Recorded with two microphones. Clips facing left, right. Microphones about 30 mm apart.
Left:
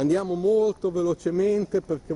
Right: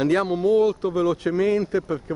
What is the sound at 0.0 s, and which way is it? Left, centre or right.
Speech, right.